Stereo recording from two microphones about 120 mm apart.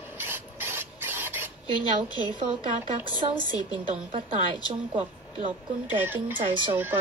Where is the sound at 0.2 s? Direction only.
20° right (ahead or behind).